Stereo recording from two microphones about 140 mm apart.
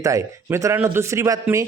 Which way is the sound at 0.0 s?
20° right (ahead or behind).